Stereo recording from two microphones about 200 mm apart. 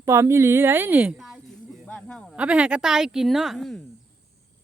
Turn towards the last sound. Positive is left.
turn(degrees=0)  # may be behind; listen again after turning